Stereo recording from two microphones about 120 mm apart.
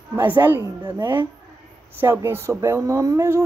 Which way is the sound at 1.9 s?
20° right (ahead or behind).